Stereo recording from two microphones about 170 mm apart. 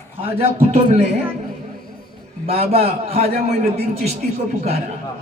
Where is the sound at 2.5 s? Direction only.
35° right (ahead or behind).